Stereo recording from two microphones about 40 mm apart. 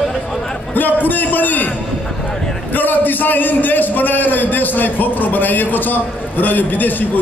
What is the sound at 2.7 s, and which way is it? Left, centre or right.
A man's voice, left.